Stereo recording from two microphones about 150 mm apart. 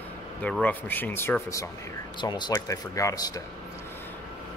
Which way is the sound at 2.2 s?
30° left (ahead or behind).